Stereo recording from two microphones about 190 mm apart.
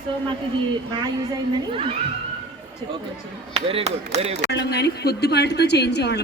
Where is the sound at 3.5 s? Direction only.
30° right (ahead or behind).